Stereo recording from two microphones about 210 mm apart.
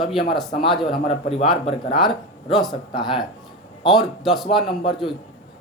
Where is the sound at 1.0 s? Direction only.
30° left (ahead or behind).